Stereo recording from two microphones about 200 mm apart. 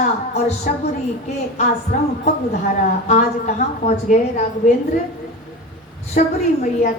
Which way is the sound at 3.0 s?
35° left (ahead or behind).